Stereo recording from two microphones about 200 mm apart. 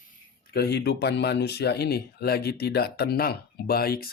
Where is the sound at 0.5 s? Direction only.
55° left (ahead or behind).